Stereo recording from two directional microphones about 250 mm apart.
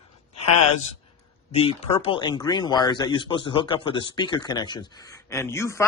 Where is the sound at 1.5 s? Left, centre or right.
Left.